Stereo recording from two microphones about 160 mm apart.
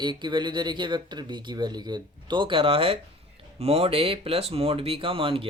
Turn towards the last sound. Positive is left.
turn(degrees=-35)  # may be behind; listen again after turning